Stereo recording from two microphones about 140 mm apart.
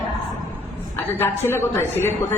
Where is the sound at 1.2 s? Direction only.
15° left (ahead or behind).